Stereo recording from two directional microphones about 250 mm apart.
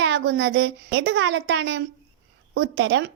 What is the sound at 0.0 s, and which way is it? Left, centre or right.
A woman's voice, right.